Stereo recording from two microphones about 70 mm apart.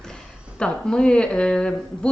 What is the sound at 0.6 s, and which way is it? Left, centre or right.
Speech, centre.